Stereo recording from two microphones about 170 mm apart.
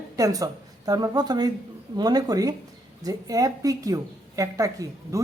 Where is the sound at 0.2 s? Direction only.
20° right (ahead or behind).